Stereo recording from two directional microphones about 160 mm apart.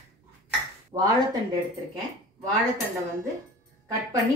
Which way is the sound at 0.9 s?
25° right (ahead or behind).